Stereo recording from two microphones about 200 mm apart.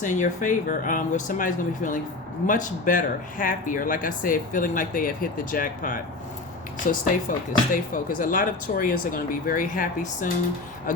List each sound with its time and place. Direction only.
0.0 s speech: 40° left (ahead or behind)